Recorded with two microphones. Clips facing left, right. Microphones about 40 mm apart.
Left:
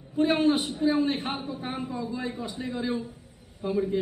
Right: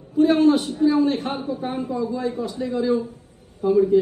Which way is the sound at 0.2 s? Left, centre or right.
Left.